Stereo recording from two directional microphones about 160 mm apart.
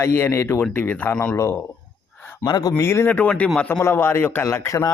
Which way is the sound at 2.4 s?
25° left (ahead or behind).